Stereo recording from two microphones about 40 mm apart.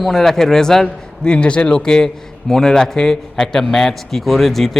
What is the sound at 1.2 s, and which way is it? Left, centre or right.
A man's voice, left.